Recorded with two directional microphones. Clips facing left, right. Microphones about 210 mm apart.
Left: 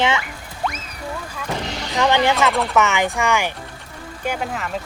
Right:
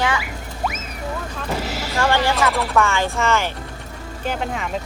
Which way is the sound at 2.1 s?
20° left (ahead or behind).